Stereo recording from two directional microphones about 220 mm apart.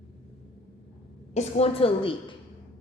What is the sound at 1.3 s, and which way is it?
A woman's voice, 25° left (ahead or behind).